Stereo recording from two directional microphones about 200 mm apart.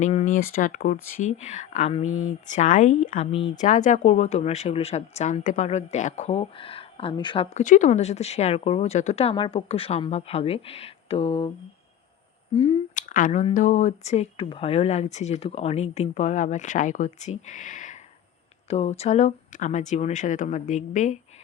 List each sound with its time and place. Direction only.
0.0 s speech: 35° left (ahead or behind)
0.5 s speech: 45° left (ahead or behind); by 3.6 s 25° left (ahead or behind)
3.6 s speech: 40° left (ahead or behind)
7.5 s speech: 40° left (ahead or behind)
12.5 s speech: 35° left (ahead or behind)